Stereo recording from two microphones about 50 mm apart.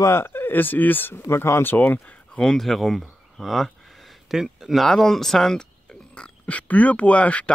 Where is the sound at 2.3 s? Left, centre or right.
Centre.